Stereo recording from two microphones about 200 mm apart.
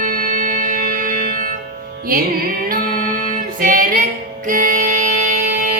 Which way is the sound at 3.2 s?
45° right (ahead or behind).